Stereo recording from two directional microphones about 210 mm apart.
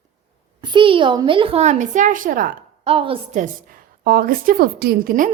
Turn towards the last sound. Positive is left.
turn(degrees=-40)  # may be behind; listen again after turning